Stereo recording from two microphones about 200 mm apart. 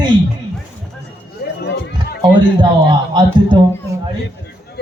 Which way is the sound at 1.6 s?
50° left (ahead or behind).